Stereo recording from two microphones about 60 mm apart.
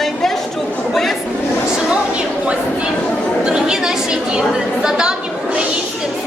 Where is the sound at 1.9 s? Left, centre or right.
Centre.